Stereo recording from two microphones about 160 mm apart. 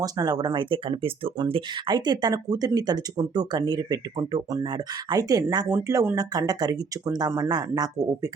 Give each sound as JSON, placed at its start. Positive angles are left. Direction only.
{"t": 0.0, "sound": "speech", "side_deg": -25}